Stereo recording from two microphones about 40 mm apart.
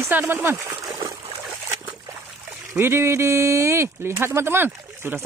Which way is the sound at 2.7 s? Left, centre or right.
Right.